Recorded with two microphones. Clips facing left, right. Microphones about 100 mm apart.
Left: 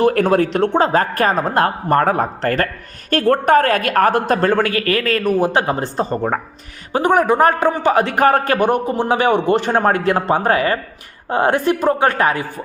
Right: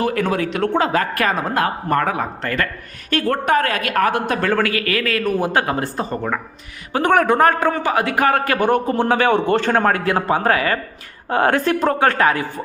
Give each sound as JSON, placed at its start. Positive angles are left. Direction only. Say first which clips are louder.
{"t": 0.1, "sound": "speech", "louder": "left 5 dB", "side_deg": 50}
{"t": 0.6, "sound": "a man's voice", "louder": "left 3 dB", "side_deg": 30}
{"t": 5.4, "sound": "a man's voice", "louder": "left 2 dB", "side_deg": 25}
{"t": 7.0, "sound": "a man's voice", "louder": "left 1 dB", "side_deg": 15}
{"t": 7.3, "sound": "a man's voice", "louder": "left 1 dB", "side_deg": 25}
{"t": 8.5, "sound": "a man's voice", "louder": "left 1 dB", "side_deg": 20}